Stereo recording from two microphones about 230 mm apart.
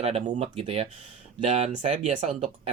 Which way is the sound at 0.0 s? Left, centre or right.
Right.